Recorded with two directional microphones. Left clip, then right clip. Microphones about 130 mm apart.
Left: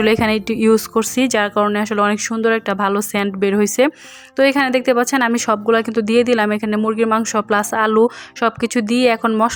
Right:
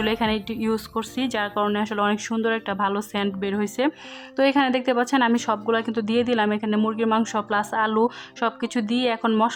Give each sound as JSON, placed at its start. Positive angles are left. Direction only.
{"t": 0.0, "sound": "speech", "side_deg": 35}
{"t": 4.4, "sound": "a woman's voice", "side_deg": 25}